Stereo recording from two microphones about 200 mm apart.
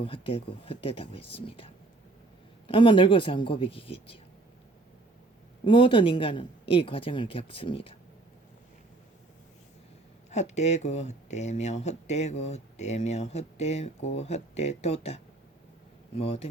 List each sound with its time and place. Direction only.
0.0 s speech: 25° left (ahead or behind)
5.6 s speech: 25° left (ahead or behind)
10.3 s speech: 35° left (ahead or behind)